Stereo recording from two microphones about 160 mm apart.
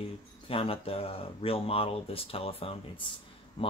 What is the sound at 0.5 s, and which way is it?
Speech, 35° left (ahead or behind).